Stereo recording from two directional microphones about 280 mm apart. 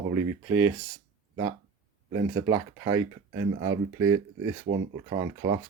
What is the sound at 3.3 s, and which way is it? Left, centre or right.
Speech, right.